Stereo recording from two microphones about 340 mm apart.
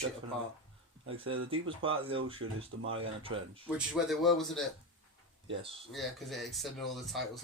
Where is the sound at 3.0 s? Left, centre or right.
Centre.